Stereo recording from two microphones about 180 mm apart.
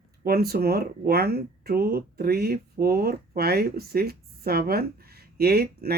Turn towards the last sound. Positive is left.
turn(degrees=-60)  # may be behind; listen again after turning